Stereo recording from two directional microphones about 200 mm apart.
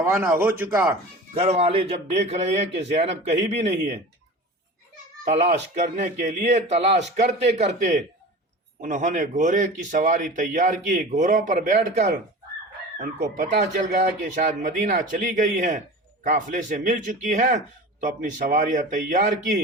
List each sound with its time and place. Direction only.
0.0 s a man's voice: 10° right (ahead or behind)
1.3 s a man's voice: 30° right (ahead or behind)
5.2 s a man's voice: 35° right (ahead or behind)
13.0 s speech: 55° right (ahead or behind)
14.3 s a man's voice: 40° right (ahead or behind)